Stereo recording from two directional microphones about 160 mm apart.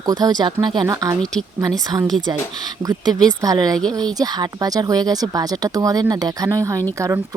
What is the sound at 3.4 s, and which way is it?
Speech, 20° right (ahead or behind).